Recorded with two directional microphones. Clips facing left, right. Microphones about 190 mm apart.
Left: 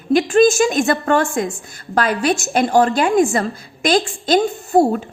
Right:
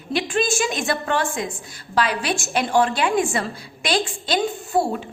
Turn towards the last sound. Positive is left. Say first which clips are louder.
# left 7 dB
turn(degrees=45)  # may be behind; listen again after turning